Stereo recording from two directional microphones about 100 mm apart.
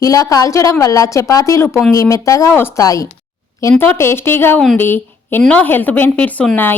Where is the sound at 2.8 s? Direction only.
35° left (ahead or behind).